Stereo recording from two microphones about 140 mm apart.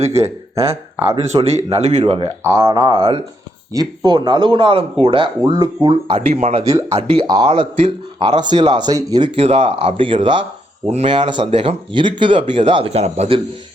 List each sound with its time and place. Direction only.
0.0 s speech: 50° right (ahead or behind)
0.5 s speech: 20° right (ahead or behind)
1.1 s speech: 50° right (ahead or behind)
2.4 s speech: 20° right (ahead or behind)
9.4 s speech: 45° right (ahead or behind)